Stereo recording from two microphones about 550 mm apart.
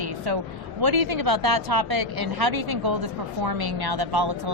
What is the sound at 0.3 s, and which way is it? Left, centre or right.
A woman's voice, right.